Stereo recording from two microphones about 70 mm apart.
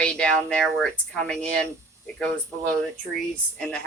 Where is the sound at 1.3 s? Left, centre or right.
Centre.